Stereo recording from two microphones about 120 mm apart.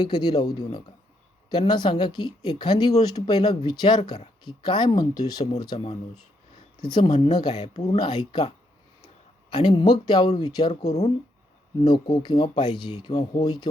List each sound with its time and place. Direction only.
0.0 s speech: 35° left (ahead or behind)
6.9 s speech: 40° left (ahead or behind)
7.5 s speech: 65° left (ahead or behind)
7.9 s speech: 35° left (ahead or behind)
9.5 s speech: 45° left (ahead or behind)
11.8 s speech: 40° left (ahead or behind)